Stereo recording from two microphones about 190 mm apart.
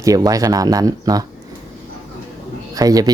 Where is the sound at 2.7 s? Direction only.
20° right (ahead or behind).